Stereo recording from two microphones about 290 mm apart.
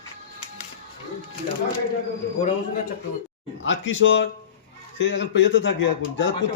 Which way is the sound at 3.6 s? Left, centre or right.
Left.